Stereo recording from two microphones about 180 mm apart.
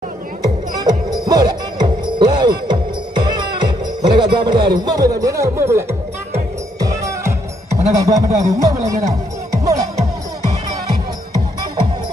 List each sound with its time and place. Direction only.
0.4 s music: 20° right (ahead or behind)
4.2 s speech: 25° right (ahead or behind)
6.8 s music: 15° right (ahead or behind)
7.9 s speech: 20° right (ahead or behind)